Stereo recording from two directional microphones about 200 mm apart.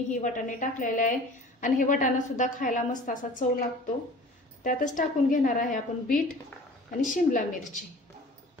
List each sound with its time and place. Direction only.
0.1 s a woman's voice: 40° left (ahead or behind)
4.6 s a woman's voice: 40° left (ahead or behind)